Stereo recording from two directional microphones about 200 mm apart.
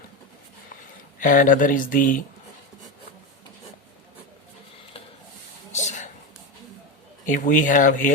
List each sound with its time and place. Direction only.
1.2 s speech: 45° left (ahead or behind)
5.7 s a sound: 40° left (ahead or behind)
7.3 s speech: 40° left (ahead or behind)